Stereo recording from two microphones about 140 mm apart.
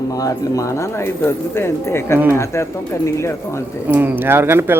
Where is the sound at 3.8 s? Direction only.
15° right (ahead or behind).